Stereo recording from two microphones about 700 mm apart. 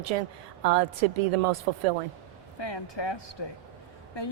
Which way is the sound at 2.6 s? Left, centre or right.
Left.